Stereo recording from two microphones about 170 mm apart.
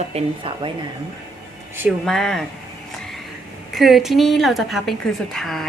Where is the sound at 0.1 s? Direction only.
35° right (ahead or behind).